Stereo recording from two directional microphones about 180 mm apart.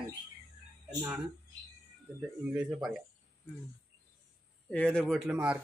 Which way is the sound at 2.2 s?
5° right (ahead or behind).